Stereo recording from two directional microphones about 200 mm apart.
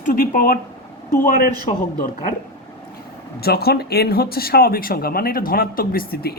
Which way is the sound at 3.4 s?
50° left (ahead or behind).